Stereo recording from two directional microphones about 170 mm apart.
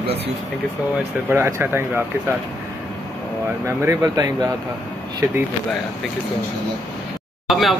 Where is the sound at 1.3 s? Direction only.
15° right (ahead or behind).